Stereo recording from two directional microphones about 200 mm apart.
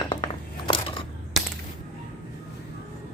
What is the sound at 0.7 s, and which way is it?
Scissors, 25° left (ahead or behind).